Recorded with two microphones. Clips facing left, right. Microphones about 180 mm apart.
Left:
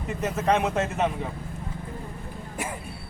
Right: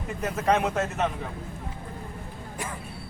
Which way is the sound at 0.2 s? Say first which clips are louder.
Even; 5° left (ahead or behind).